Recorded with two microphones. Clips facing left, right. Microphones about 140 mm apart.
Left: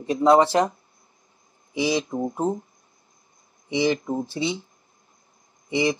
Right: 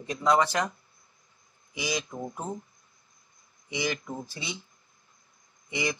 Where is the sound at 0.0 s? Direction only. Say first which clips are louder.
Left 7 dB; 30° left (ahead or behind).